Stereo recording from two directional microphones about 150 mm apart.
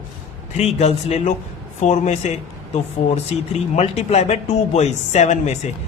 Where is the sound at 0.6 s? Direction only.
45° left (ahead or behind).